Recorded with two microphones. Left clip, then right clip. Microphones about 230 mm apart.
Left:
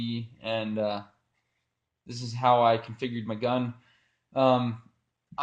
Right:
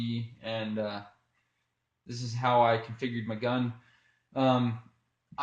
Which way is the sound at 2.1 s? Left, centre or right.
Left.